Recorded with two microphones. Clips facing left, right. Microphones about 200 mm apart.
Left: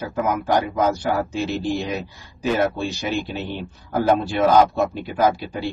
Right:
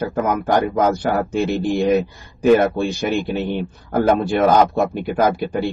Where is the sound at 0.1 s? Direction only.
55° right (ahead or behind).